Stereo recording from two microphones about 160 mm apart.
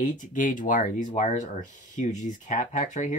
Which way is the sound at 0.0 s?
55° left (ahead or behind).